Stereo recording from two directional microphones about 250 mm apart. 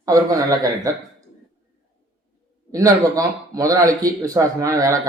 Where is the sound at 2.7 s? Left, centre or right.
Centre.